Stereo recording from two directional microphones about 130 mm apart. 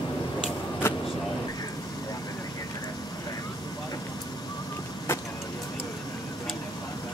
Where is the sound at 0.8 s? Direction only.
20° left (ahead or behind).